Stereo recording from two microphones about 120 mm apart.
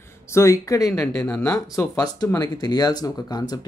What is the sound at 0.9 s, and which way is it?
Speech, 5° left (ahead or behind).